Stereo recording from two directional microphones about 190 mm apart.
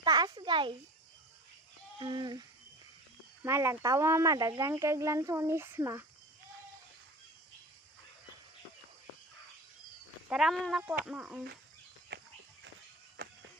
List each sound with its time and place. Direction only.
0.0 s a child's voice: 20° right (ahead or behind)
2.0 s a sound: 25° right (ahead or behind)
3.4 s speech: 15° right (ahead or behind)
10.2 s speech: centre (ahead or behind)
12.1 s music: 60° right (ahead or behind)